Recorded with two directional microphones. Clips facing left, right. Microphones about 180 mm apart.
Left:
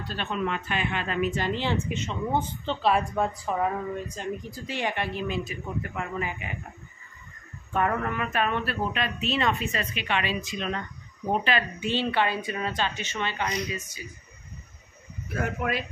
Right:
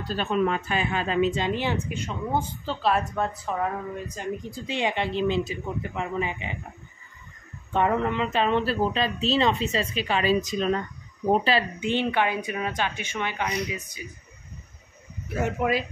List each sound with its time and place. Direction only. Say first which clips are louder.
0.0 s speech: right 5 dB; 40° right (ahead or behind)
1.3 s a woman's voice: right 1 dB; 15° right (ahead or behind); by 3.8 s centre (ahead or behind)
4.6 s speech: right 4 dB; 20° right (ahead or behind)
7.7 s speech: right 3 dB; 20° right (ahead or behind)
11.8 s speech: right 2 dB; 15° right (ahead or behind)
15.2 s speech: right 4 dB; 25° right (ahead or behind)